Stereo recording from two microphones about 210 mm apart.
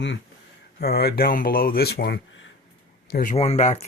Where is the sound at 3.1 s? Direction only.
40° left (ahead or behind).